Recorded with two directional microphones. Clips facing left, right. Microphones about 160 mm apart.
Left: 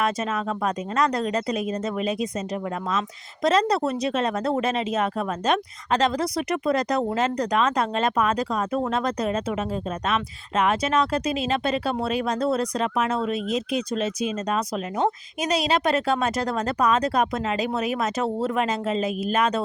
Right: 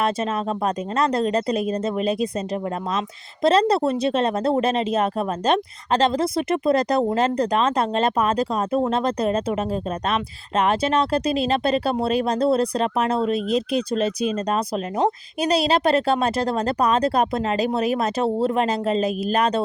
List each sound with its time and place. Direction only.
0.0 s speech: 30° right (ahead or behind)
3.4 s speech: 30° right (ahead or behind)